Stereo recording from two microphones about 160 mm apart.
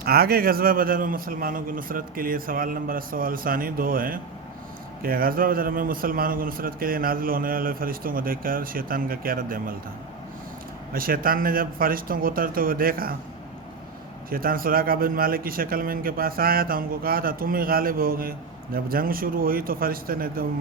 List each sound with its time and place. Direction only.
0.0 s a man's voice: 75° right (ahead or behind)
10.9 s a man's voice: 65° right (ahead or behind)
14.3 s a man's voice: 65° right (ahead or behind)